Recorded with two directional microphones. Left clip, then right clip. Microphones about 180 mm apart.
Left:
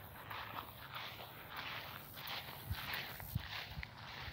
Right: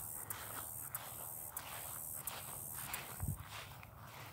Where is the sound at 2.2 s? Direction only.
50° left (ahead or behind).